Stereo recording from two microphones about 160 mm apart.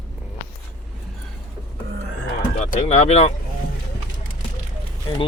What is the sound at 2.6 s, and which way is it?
Speech, 50° left (ahead or behind).